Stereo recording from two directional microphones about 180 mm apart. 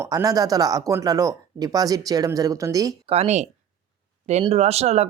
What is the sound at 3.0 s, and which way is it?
Speech, 35° right (ahead or behind).